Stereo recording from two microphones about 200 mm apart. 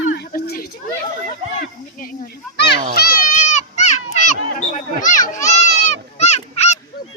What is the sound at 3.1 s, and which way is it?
Children playing, 35° left (ahead or behind).